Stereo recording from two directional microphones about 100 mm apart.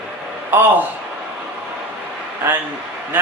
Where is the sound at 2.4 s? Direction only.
20° right (ahead or behind).